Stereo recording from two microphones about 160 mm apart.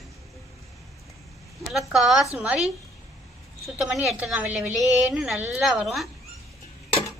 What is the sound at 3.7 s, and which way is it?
A woman's voice, centre (ahead or behind).